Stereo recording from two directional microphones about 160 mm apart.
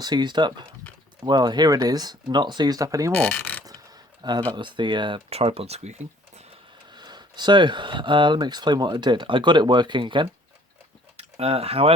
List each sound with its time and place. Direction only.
0.0 s speech: 25° right (ahead or behind)
3.1 s mechanisms: 5° left (ahead or behind)
3.7 s a sound: 25° right (ahead or behind)
4.5 s speech: 30° right (ahead or behind)
6.9 s speech: 25° right (ahead or behind)